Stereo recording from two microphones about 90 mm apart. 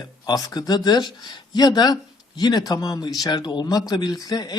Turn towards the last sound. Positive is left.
turn(degrees=45)  # may be behind; listen again after turning